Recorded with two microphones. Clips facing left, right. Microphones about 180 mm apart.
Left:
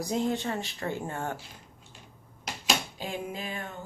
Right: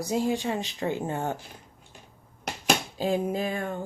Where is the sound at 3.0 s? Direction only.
40° right (ahead or behind).